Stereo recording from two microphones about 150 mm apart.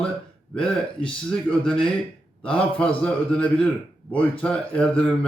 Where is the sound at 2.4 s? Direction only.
5° left (ahead or behind).